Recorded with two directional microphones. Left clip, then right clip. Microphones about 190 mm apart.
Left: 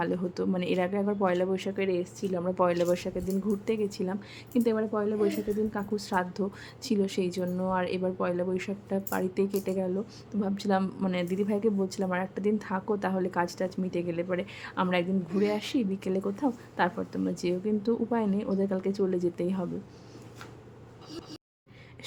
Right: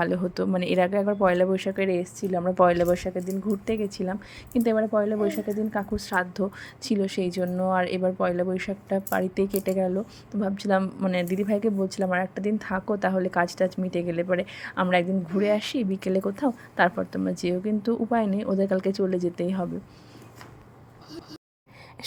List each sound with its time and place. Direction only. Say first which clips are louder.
0.0 s a woman's voice: right 4 dB; 20° right (ahead or behind)
11.1 s a woman's voice: right 4 dB; 20° right (ahead or behind)